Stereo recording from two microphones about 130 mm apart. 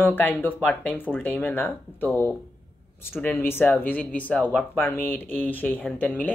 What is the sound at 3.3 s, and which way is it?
Speech, 15° left (ahead or behind).